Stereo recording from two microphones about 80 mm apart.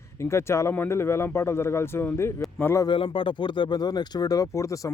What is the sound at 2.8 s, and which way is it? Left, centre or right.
Speech, left.